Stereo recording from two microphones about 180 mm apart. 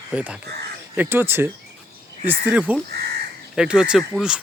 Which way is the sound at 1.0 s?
10° right (ahead or behind).